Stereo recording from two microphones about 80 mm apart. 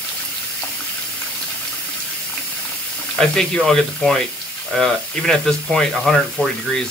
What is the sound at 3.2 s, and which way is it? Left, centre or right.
Speech, centre.